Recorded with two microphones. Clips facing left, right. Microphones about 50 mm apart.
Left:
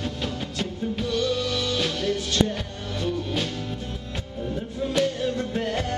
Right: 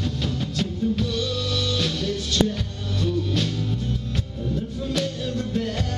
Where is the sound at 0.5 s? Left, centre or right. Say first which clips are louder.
Right 5 dB; centre.